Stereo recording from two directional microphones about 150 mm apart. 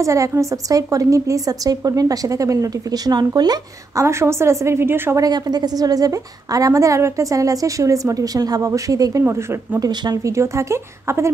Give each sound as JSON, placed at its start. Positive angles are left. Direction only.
{"t": 0.0, "sound": "a woman's voice", "side_deg": -20}